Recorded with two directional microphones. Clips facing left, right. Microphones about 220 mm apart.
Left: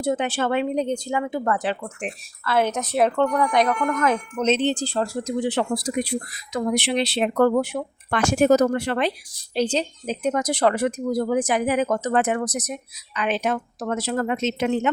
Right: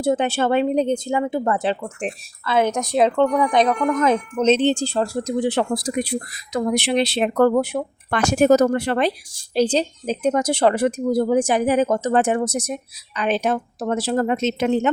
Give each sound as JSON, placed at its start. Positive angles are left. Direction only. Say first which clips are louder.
{"t": 0.0, "sound": "a woman's voice", "louder": "right 4 dB", "side_deg": -30}